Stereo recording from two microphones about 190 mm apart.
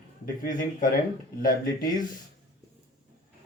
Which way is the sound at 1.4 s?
45° left (ahead or behind).